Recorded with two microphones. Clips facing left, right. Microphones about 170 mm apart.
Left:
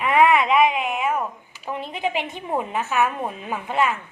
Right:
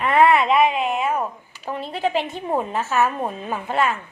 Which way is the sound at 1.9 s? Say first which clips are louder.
Right 4 dB; 35° right (ahead or behind).